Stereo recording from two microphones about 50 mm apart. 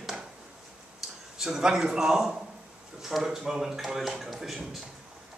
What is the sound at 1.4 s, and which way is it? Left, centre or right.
Speech, centre.